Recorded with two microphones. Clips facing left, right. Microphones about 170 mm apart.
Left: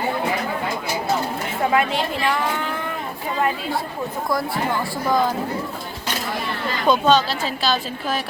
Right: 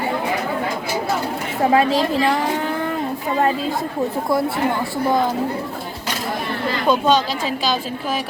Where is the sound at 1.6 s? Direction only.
35° right (ahead or behind).